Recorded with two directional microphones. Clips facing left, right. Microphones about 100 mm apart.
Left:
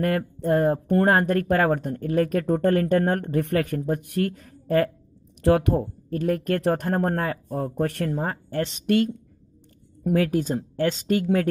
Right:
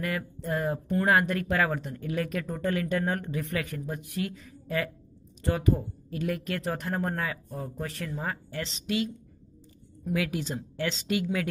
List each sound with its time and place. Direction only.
0.0 s speech: 50° left (ahead or behind)
5.4 s speech: 80° left
6.0 s speech: 45° left (ahead or behind)
7.5 s speech: 60° left (ahead or behind)
8.2 s speech: 45° left (ahead or behind)
10.1 s speech: 40° left (ahead or behind)